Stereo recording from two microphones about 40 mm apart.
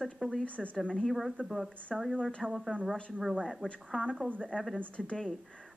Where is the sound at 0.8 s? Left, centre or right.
Left.